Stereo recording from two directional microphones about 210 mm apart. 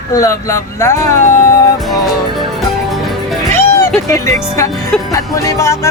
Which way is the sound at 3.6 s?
15° left (ahead or behind).